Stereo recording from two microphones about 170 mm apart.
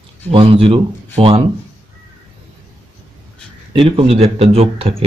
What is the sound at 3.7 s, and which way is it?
A man's voice, 35° right (ahead or behind).